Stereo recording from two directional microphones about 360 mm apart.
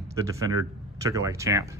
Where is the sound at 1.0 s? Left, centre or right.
Centre.